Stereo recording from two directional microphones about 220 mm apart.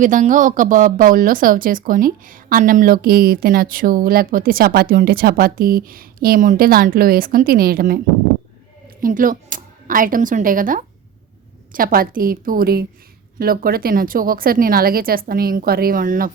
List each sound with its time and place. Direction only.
0.0 s speech: 35° right (ahead or behind)